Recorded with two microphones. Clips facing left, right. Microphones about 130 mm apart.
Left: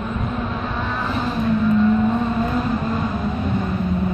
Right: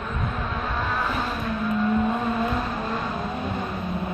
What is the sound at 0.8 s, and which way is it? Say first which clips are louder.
Vehicle: left 2 dB; centre (ahead or behind).